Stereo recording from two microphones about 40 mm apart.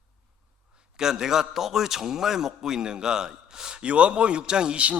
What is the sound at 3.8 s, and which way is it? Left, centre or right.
Speech, right.